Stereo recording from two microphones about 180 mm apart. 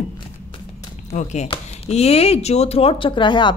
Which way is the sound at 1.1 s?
40° left (ahead or behind).